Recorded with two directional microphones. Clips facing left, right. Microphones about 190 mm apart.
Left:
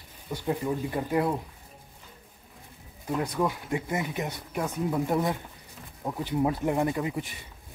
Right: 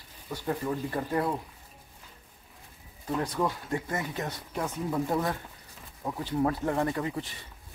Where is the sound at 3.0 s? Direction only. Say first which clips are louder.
Left 1 dB; 10° left (ahead or behind).